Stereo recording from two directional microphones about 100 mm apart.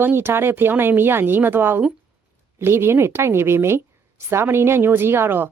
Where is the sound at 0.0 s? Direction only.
25° right (ahead or behind).